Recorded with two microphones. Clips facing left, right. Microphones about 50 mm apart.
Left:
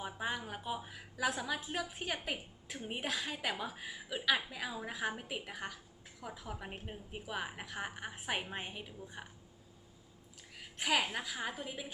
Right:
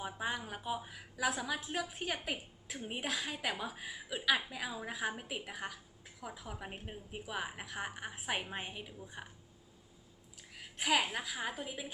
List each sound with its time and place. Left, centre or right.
0.0 s a woman's voice: centre
10.6 s a woman's voice: centre